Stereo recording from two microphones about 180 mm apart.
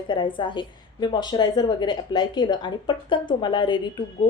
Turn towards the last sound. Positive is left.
turn(degrees=25)  # may be behind; listen again after turning